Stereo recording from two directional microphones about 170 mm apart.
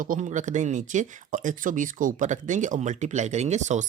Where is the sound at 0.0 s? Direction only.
50° right (ahead or behind).